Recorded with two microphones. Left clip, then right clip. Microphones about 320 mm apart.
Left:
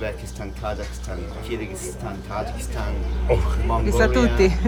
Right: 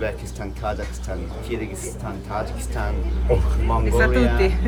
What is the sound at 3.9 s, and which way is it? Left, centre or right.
Speech, centre.